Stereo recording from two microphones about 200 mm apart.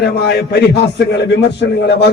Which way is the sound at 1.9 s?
55° left (ahead or behind).